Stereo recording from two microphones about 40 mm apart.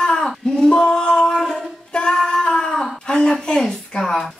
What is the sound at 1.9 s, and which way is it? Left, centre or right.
Female singing, left.